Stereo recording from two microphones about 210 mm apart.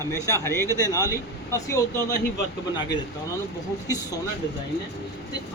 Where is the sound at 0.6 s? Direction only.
15° right (ahead or behind).